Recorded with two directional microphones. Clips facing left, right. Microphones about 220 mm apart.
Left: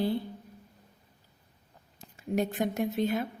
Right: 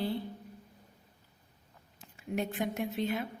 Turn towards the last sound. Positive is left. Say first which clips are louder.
# left 4 dB
turn(degrees=40)  # may be behind; listen again after turning